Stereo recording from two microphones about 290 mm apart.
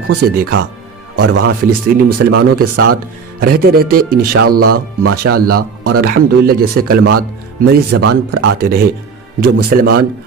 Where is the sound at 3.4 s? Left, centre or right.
Right.